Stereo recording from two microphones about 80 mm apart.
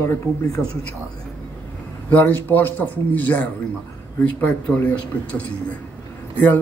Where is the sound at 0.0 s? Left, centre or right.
Left.